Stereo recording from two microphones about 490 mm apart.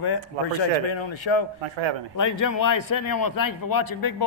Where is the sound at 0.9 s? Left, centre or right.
Left.